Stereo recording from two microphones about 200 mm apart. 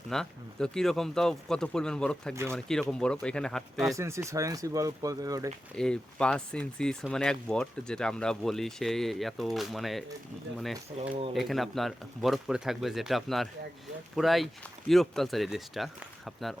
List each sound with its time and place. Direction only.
0.1 s speech: 5° left (ahead or behind)
3.9 s speech: 15° right (ahead or behind)
5.7 s speech: 5° left (ahead or behind)